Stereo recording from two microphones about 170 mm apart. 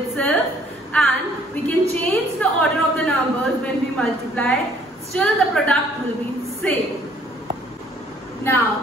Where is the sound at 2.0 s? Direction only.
10° left (ahead or behind).